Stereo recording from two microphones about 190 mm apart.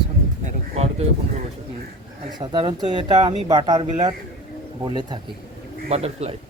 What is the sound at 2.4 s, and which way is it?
Speech, 25° right (ahead or behind).